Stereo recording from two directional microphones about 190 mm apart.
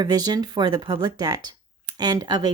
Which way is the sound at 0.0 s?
20° right (ahead or behind).